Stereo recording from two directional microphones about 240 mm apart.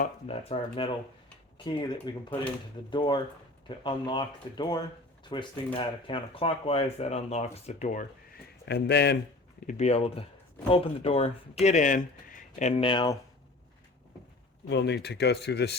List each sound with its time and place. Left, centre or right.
0.0 s speech: left
8.6 s speech: left
9.6 s speech: left
14.7 s speech: left